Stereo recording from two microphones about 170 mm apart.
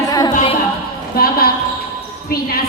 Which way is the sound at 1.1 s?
60° left (ahead or behind).